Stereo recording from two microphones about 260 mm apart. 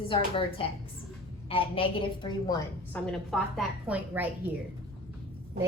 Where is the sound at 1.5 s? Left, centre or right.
Left.